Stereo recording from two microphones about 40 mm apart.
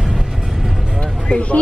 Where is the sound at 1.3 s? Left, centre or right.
Left.